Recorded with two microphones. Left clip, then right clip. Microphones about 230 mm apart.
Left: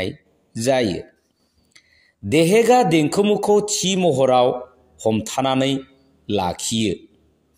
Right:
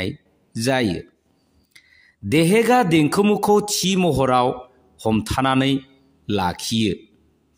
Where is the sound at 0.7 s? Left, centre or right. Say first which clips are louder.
Left 2 dB; right.